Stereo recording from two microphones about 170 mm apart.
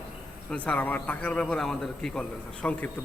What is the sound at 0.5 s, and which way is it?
A man's voice, 10° left (ahead or behind).